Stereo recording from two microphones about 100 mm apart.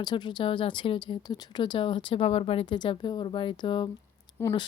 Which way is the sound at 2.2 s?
80° left.